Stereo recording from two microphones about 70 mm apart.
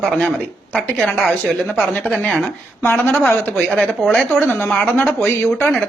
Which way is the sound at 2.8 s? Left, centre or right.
Left.